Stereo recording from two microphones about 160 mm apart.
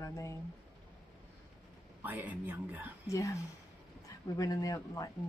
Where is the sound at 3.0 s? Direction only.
20° left (ahead or behind).